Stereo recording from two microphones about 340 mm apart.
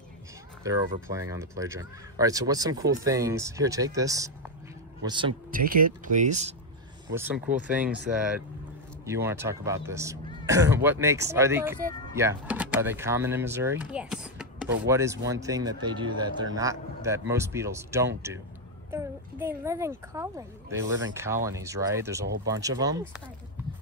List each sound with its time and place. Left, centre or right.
0.7 s speech: centre
7.2 s speech: centre